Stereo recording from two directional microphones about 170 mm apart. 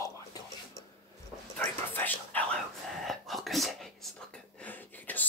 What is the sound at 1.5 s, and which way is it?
Speech, 10° left (ahead or behind).